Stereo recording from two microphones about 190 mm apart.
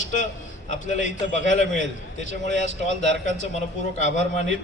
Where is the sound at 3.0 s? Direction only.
65° right (ahead or behind).